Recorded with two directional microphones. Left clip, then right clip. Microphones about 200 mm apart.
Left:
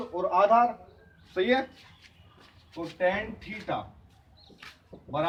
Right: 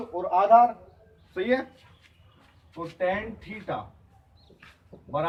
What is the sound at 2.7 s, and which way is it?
Speech, 10° left (ahead or behind).